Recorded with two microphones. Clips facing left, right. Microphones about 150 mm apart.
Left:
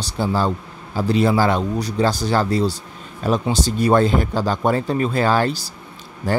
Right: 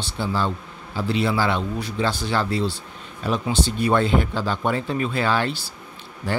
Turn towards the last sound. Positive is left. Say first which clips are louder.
# left 5 dB
turn(degrees=45)  # may be behind; listen again after turning